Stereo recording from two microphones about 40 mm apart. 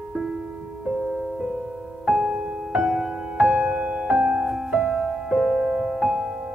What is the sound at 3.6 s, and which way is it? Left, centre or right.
Music, right.